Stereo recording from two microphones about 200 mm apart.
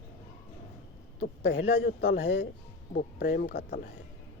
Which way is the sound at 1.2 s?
55° left (ahead or behind).